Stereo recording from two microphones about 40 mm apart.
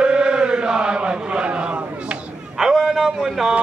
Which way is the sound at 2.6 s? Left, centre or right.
Centre.